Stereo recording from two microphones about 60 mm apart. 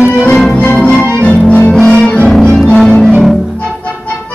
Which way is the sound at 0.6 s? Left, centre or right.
Left.